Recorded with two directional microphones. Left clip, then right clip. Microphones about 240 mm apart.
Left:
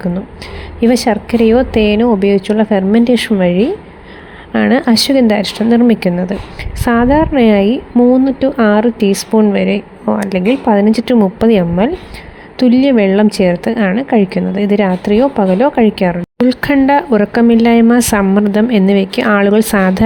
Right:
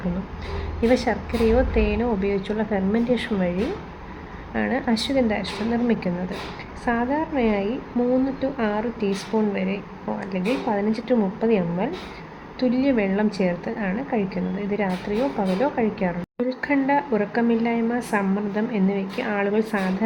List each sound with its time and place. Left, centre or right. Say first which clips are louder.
0.8 s a woman's voice: left 9 dB; left